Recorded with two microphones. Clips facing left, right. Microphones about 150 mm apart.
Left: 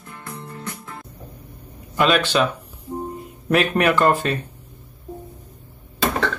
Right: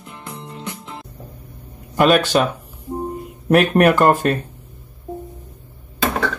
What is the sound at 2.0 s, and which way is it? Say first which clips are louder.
Speech: right 4 dB; 45° right (ahead or behind).